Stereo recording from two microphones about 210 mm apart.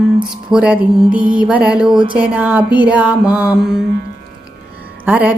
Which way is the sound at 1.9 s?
25° right (ahead or behind).